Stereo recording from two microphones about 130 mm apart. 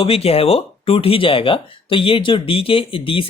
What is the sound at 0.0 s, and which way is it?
Speech, 50° left (ahead or behind).